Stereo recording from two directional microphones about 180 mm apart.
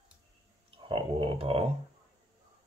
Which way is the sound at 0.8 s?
30° right (ahead or behind).